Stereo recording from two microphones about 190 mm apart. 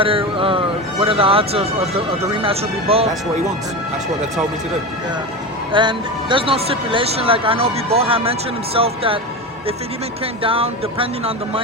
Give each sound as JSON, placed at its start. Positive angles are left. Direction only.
{"t": 0.0, "sound": "a man's voice", "side_deg": -30}
{"t": 5.7, "sound": "speech", "side_deg": -25}
{"t": 10.4, "sound": "speech", "side_deg": -30}